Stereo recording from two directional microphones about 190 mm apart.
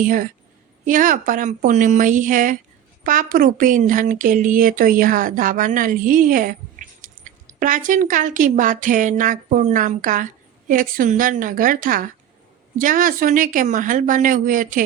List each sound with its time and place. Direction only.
0.9 s a woman's voice: 45° right (ahead or behind)